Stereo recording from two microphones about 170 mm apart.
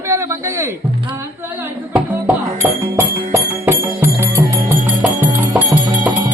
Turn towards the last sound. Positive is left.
turn(degrees=-10)  # may be behind; listen again after turning